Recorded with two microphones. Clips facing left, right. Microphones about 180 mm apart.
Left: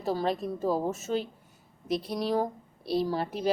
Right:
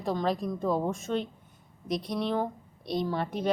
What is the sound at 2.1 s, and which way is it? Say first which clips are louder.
Speech: left 1 dB; 35° left (ahead or behind).